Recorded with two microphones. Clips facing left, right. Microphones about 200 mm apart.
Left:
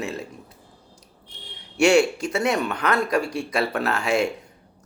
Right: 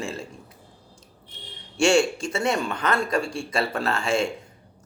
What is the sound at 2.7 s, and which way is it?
Speech, 65° left (ahead or behind).